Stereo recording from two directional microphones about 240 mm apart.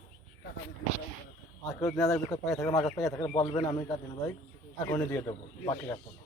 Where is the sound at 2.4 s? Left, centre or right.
Centre.